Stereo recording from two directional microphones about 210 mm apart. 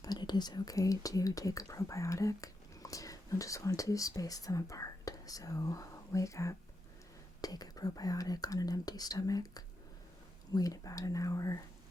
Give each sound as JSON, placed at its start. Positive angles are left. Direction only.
{"t": 0.0, "sound": "speech", "side_deg": 20}